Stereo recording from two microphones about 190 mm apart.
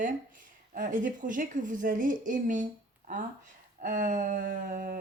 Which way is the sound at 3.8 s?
45° right (ahead or behind).